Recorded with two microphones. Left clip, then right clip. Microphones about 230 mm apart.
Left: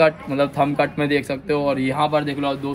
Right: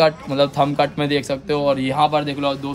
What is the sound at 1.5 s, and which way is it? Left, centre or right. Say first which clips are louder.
Speech: right 3 dB; right.